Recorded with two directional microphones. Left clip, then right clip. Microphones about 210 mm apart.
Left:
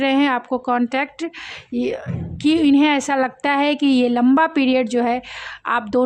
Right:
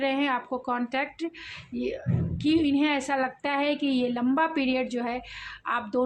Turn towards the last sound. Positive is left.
turn(degrees=45)  # may be behind; listen again after turning